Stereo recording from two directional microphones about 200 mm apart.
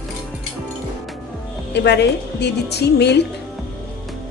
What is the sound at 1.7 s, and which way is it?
A woman's voice, 60° left (ahead or behind).